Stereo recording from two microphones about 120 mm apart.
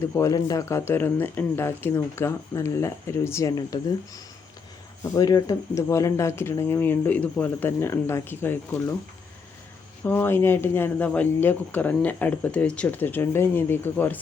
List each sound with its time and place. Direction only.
0.1 s speech: 30° left (ahead or behind)
10.0 s speech: 15° left (ahead or behind)